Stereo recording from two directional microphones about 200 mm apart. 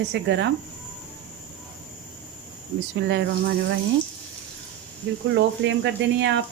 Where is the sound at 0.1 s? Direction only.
60° right (ahead or behind).